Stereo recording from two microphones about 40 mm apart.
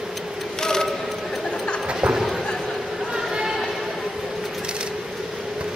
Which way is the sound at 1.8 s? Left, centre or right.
Right.